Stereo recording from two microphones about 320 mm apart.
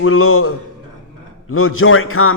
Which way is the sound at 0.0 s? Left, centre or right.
Left.